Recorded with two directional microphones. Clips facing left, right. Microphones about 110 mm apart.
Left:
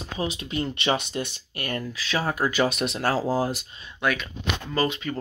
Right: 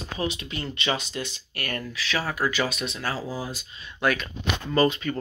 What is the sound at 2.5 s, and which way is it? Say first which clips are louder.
Speech: left 4 dB; 45° left (ahead or behind).